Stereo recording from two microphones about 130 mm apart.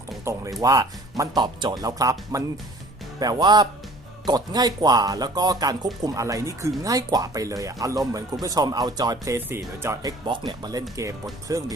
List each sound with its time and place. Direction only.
0.3 s speech: 20° right (ahead or behind)
10.0 s speech: 30° right (ahead or behind)